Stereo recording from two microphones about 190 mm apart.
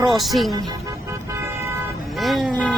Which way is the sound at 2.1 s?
Centre (ahead or behind).